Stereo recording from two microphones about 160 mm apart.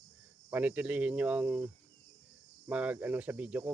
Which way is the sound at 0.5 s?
10° right (ahead or behind).